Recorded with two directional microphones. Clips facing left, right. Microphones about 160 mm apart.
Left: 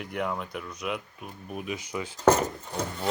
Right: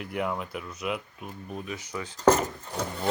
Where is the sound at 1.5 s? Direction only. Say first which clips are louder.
Left 3 dB; 15° left (ahead or behind).